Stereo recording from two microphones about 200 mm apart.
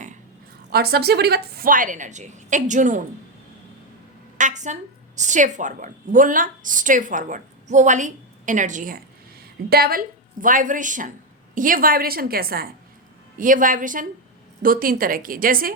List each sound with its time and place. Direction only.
0.7 s a woman's voice: 50° right (ahead or behind)
4.4 s a woman's voice: 40° right (ahead or behind)